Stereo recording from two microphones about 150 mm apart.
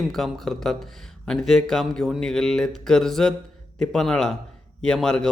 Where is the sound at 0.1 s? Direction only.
Centre (ahead or behind).